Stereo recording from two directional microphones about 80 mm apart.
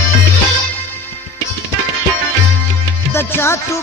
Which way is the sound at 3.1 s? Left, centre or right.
Left.